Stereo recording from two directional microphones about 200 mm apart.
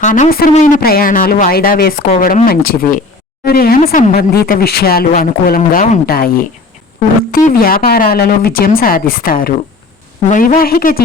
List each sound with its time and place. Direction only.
0.0 s speech: 40° left (ahead or behind)